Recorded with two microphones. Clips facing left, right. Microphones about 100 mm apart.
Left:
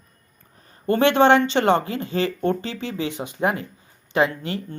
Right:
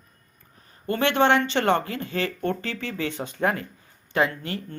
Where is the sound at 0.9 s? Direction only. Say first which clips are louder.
Left 5 dB; 25° left (ahead or behind).